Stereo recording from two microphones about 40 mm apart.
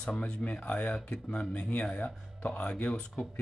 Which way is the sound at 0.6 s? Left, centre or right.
Left.